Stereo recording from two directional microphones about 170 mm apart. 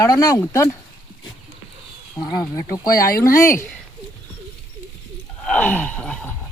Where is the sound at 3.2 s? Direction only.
15° left (ahead or behind).